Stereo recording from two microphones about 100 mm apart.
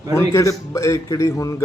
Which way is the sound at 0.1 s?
30° left (ahead or behind).